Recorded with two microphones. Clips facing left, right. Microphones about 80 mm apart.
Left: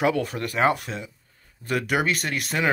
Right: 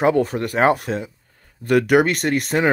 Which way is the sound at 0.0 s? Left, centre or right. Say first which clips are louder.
Right 6 dB; right.